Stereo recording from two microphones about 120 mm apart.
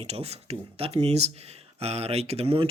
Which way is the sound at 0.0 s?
60° right (ahead or behind).